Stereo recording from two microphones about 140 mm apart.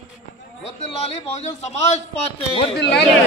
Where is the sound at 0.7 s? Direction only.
45° left (ahead or behind).